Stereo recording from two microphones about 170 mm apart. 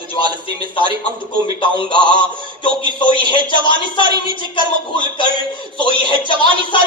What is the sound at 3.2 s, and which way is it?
Speech, 30° left (ahead or behind).